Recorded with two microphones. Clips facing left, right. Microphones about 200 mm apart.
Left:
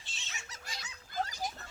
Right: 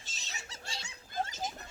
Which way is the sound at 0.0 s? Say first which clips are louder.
Right 2 dB; 40° right (ahead or behind).